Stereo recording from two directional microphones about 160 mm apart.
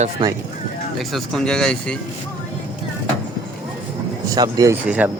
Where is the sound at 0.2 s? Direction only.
30° right (ahead or behind).